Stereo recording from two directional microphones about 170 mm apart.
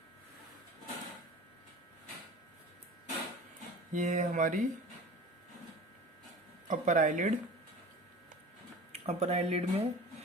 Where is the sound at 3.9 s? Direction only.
50° right (ahead or behind).